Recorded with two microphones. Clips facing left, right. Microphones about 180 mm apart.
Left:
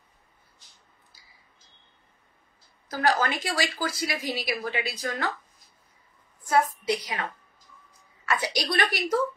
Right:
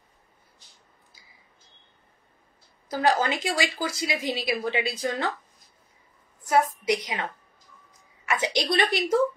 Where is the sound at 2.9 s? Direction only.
25° right (ahead or behind).